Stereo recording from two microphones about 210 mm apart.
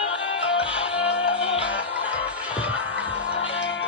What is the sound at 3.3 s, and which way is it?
Music, 60° left (ahead or behind).